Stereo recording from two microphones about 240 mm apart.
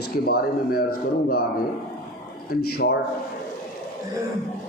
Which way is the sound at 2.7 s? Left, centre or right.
Left.